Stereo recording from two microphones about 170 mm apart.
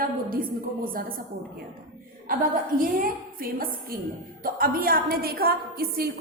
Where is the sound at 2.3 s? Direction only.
55° right (ahead or behind).